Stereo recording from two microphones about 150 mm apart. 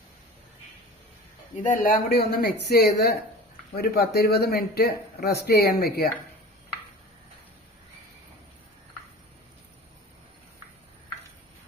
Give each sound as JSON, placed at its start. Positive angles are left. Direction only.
{"t": 1.6, "sound": "speech", "side_deg": 65}